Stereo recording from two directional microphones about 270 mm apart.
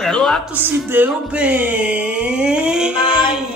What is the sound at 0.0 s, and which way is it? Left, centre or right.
Speech, centre.